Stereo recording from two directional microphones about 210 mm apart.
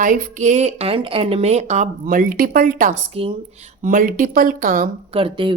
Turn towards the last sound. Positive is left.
turn(degrees=-25)  # may be behind; listen again after turning